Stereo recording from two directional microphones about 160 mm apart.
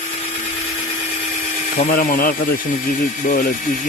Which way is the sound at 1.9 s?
60° left (ahead or behind).